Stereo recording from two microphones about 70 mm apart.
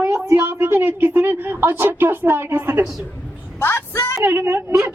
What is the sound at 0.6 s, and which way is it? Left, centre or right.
A woman's voice, right.